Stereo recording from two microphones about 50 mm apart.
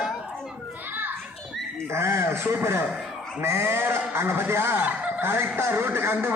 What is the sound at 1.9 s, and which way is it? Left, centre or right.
A man's voice, right.